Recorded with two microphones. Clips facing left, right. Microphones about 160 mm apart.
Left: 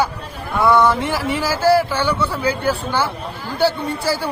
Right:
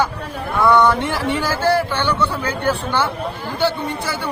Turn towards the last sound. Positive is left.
turn(degrees=35)  # may be behind; listen again after turning